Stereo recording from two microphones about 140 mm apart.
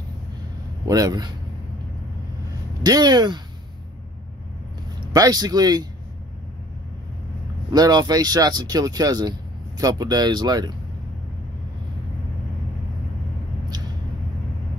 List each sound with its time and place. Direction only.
0.8 s speech: 25° right (ahead or behind)
2.8 s speech: 30° right (ahead or behind)
5.1 s speech: 30° right (ahead or behind)
7.7 s speech: 30° right (ahead or behind)